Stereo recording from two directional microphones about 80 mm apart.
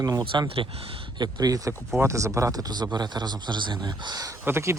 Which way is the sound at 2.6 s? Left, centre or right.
Right.